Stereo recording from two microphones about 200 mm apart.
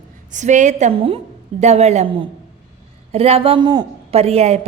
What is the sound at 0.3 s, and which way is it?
A man's voice, 35° right (ahead or behind).